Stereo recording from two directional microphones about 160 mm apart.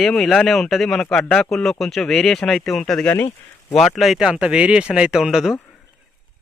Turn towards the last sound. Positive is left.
turn(degrees=-5)  # may be behind; listen again after turning